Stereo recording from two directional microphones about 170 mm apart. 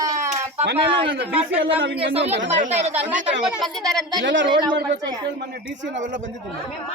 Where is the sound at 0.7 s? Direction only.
75° right (ahead or behind).